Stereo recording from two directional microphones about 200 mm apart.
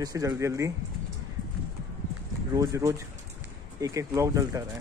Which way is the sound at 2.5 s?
15° right (ahead or behind).